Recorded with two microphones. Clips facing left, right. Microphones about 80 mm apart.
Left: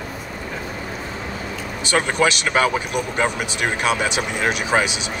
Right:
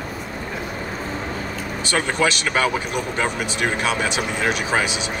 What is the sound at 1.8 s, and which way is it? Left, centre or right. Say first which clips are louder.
Speech: left 2 dB; centre.